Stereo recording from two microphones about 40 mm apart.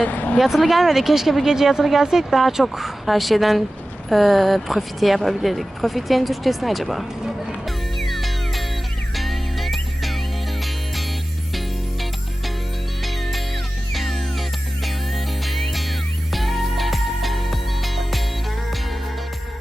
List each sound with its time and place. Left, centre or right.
0.0 s speech: left
0.3 s speech: centre
7.9 s music: centre
13.0 s music: centre